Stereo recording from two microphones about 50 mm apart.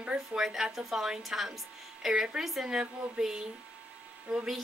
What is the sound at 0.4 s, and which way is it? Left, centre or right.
A woman's voice, centre.